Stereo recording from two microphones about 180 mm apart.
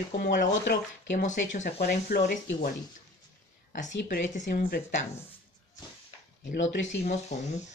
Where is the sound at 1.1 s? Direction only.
45° left (ahead or behind).